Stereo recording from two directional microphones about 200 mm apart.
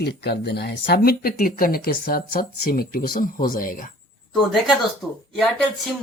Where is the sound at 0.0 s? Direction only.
55° left (ahead or behind).